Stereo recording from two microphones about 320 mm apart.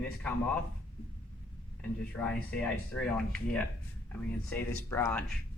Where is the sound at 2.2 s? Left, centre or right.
Centre.